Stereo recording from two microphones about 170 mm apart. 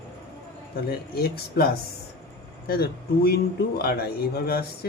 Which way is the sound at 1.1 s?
65° left (ahead or behind).